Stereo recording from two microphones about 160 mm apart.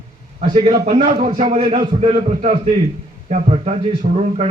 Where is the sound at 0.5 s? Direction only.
45° right (ahead or behind).